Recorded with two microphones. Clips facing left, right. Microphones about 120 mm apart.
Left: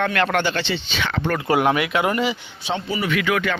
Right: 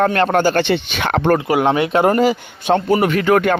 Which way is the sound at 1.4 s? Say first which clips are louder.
Right 3 dB; 20° right (ahead or behind).